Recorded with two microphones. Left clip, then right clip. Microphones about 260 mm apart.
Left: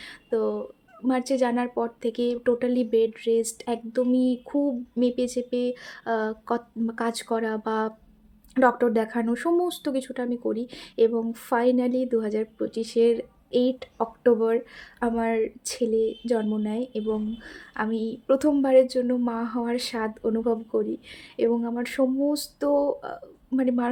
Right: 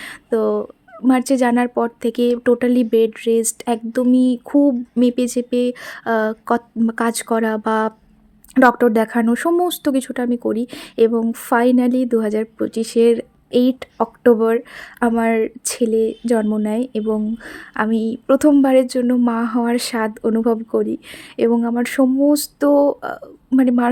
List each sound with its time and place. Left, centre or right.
0.0 s fowl: right
1.0 s speech: right